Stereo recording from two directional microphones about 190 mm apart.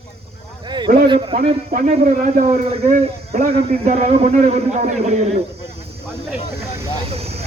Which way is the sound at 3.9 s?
35° right (ahead or behind).